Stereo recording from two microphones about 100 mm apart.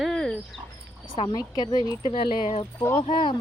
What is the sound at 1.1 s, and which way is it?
Speech, 60° left (ahead or behind).